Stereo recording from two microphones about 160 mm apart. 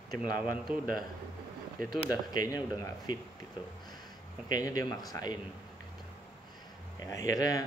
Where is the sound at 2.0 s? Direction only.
20° left (ahead or behind).